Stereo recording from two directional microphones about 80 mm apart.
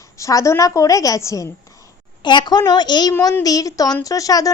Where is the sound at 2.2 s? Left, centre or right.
Left.